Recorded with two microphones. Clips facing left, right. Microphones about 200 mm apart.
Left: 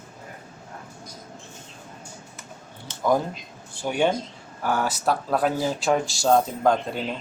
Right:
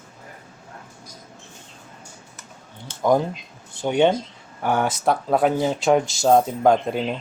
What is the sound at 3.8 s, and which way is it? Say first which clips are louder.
Speech: right 4 dB; 20° right (ahead or behind).